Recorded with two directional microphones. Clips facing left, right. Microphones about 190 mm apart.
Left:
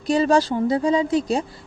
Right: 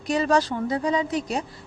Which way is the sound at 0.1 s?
30° left (ahead or behind).